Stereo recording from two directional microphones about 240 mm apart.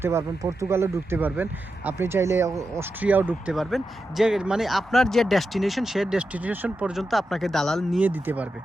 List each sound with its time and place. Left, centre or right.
0.0 s speech: centre